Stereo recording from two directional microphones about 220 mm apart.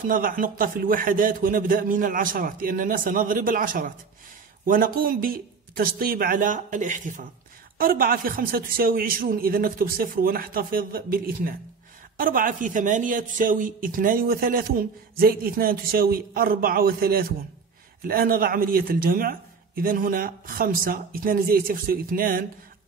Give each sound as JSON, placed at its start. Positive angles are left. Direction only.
{"t": 0.0, "sound": "speech", "side_deg": -40}